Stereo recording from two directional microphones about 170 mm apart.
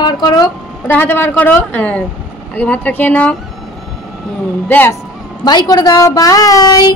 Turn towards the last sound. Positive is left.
turn(degrees=20)  # may be behind; listen again after turning